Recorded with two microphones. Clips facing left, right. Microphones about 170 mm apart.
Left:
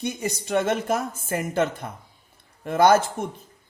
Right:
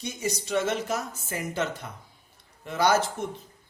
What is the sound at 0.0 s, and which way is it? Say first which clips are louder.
Speech: left 3 dB; 55° left (ahead or behind).